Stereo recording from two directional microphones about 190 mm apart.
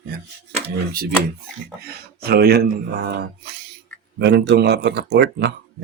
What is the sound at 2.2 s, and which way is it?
Speech, 55° right (ahead or behind).